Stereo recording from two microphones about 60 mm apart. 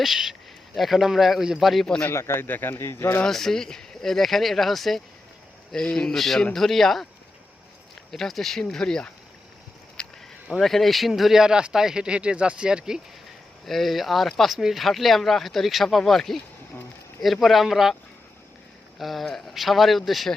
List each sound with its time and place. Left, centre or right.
0.0 s speech: centre
2.1 s speech: left
3.2 s speech: centre
8.1 s speech: centre
10.0 s a sound: centre
10.5 s speech: centre
13.7 s speech: centre
17.4 s speech: centre
18.9 s speech: centre